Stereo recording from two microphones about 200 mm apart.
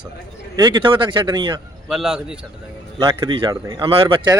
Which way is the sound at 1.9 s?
5° right (ahead or behind).